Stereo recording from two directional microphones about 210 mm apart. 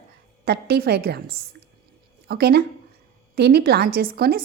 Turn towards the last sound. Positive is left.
turn(degrees=-45)  # may be behind; listen again after turning